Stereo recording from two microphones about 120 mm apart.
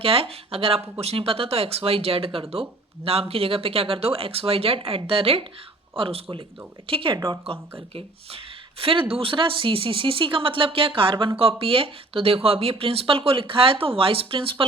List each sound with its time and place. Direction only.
0.0 s speech: 50° right (ahead or behind)
8.8 s speech: 50° right (ahead or behind)